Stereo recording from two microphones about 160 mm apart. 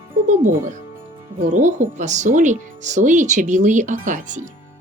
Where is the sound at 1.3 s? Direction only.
50° right (ahead or behind).